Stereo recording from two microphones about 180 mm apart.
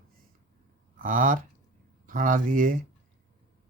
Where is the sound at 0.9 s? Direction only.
50° right (ahead or behind).